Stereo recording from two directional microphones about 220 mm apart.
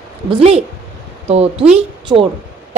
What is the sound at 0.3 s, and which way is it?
A woman's voice, 30° right (ahead or behind).